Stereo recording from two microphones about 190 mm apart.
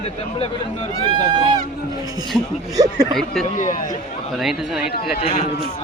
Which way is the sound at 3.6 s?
40° left (ahead or behind).